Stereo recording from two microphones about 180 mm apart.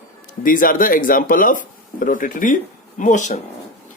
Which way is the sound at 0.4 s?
50° left (ahead or behind).